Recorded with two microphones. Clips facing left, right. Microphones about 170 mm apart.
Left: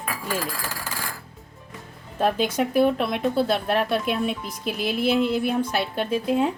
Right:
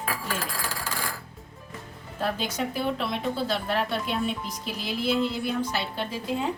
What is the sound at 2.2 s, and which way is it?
Speech, 55° left (ahead or behind).